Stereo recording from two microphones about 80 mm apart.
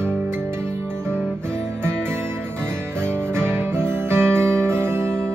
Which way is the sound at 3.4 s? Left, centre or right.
Right.